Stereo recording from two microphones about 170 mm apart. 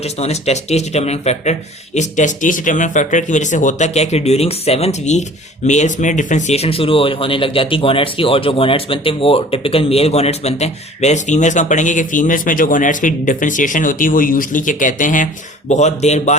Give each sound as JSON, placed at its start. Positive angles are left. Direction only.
{"t": 0.0, "sound": "speech", "side_deg": 40}